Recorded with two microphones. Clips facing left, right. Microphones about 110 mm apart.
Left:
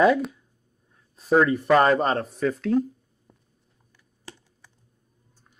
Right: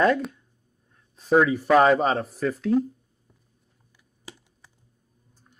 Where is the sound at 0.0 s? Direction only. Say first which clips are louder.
Left 2 dB; 5° left (ahead or behind).